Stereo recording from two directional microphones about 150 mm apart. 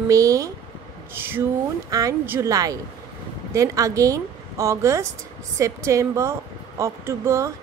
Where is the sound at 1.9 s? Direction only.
20° right (ahead or behind).